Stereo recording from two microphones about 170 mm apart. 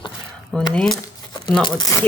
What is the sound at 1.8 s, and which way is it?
Speech, 20° left (ahead or behind).